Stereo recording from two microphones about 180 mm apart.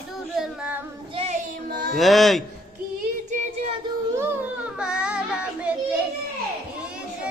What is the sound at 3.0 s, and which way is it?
Child singing, 45° right (ahead or behind).